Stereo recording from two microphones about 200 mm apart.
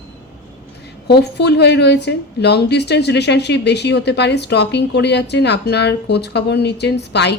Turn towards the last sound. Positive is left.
turn(degrees=60)  # may be behind; listen again after turning